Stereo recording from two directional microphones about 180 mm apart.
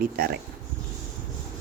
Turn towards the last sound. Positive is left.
turn(degrees=-55)  # may be behind; listen again after turning